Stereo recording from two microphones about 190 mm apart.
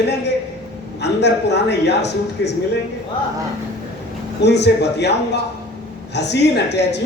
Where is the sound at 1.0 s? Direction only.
65° left (ahead or behind).